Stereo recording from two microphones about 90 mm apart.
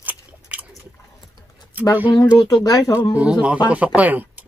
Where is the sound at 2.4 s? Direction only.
45° left (ahead or behind).